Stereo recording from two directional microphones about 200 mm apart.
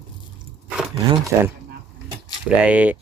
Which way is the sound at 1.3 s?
15° right (ahead or behind).